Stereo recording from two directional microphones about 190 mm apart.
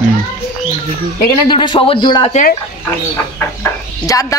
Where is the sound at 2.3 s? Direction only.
45° left (ahead or behind).